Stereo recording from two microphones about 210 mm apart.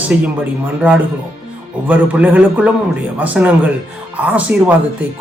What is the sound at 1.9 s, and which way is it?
A man's voice, 5° right (ahead or behind).